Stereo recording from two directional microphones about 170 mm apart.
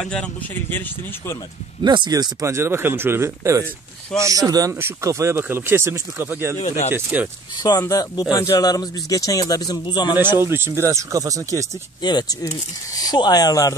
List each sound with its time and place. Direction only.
0.0 s speech: 5° left (ahead or behind)
1.8 s speech: 25° right (ahead or behind); by 7.2 s 10° right (ahead or behind)
7.5 s speech: 20° left (ahead or behind)
10.3 s speech: 15° right (ahead or behind)
12.0 s speech: 25° left (ahead or behind)